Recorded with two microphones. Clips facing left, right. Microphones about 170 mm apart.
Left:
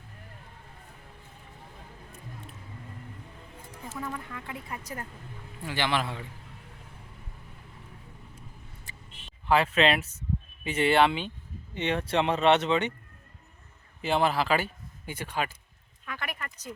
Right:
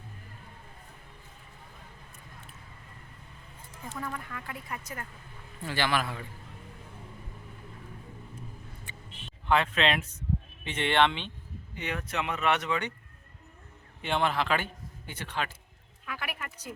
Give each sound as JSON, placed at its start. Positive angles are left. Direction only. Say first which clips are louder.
{"t": 4.0, "sound": "speech", "louder": "left 1 dB", "side_deg": 20}
{"t": 5.6, "sound": "speech", "louder": "even", "side_deg": 20}
{"t": 9.5, "sound": "speech", "louder": "left 3 dB", "side_deg": 5}
{"t": 11.7, "sound": "speech", "louder": "left 7 dB", "side_deg": 25}
{"t": 14.0, "sound": "speech", "louder": "left 3 dB", "side_deg": 5}
{"t": 16.0, "sound": "a sound", "louder": "left 1 dB", "side_deg": -5}